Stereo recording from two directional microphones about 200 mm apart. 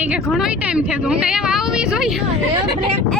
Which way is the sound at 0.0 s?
5° right (ahead or behind).